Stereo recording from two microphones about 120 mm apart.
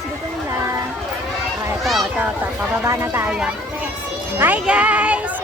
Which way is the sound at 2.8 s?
20° right (ahead or behind).